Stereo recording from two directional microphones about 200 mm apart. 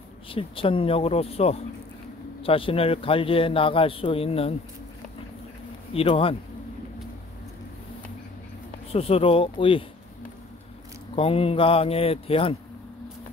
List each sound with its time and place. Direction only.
0.3 s a man's voice: 25° left (ahead or behind)
5.9 s a man's voice: 30° left (ahead or behind)
8.9 s a man's voice: 30° left (ahead or behind)
11.1 s a man's voice: 30° left (ahead or behind)